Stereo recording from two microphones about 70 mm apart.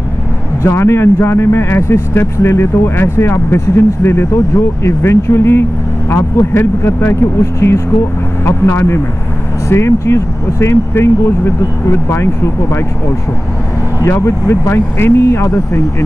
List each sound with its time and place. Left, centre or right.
0.6 s speech: left
14.0 s speech: left